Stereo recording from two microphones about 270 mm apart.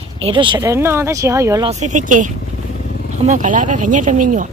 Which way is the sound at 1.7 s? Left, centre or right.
Right.